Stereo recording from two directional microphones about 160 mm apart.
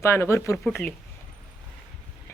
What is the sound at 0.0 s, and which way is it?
Speech, 15° left (ahead or behind).